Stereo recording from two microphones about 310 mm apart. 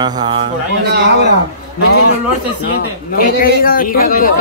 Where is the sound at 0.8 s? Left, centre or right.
Right.